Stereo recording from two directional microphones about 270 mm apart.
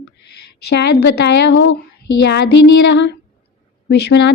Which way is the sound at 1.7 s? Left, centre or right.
Left.